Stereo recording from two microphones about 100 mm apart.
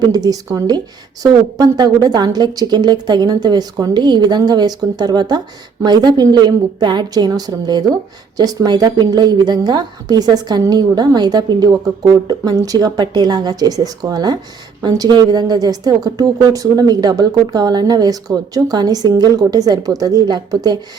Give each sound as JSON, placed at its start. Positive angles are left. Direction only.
{"t": 0.1, "sound": "a woman's voice", "side_deg": -40}